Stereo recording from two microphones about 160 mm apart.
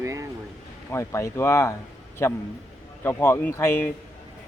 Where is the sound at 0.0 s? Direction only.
20° right (ahead or behind).